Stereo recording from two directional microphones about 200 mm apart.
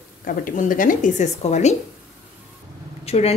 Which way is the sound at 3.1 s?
30° left (ahead or behind).